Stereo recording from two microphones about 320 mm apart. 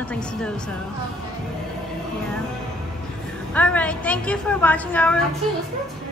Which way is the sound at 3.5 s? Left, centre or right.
Centre.